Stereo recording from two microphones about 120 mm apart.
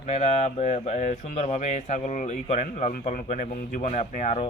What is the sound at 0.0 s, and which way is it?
Speech, 75° left (ahead or behind).